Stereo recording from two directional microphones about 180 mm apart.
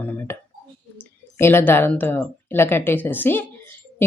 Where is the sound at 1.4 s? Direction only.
15° left (ahead or behind).